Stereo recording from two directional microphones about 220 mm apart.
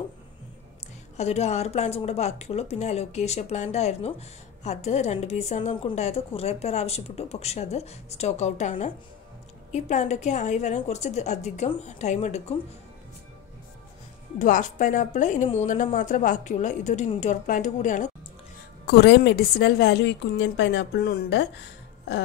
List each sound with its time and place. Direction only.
1.1 s a woman's voice: 30° left (ahead or behind)
14.4 s a woman's voice: 35° left (ahead or behind)
18.9 s a woman's voice: 50° left (ahead or behind)